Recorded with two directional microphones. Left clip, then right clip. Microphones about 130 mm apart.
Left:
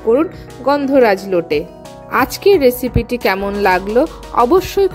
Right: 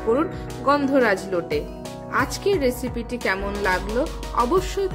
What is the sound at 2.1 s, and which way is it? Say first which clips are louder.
Speech: left 10 dB; 65° left (ahead or behind).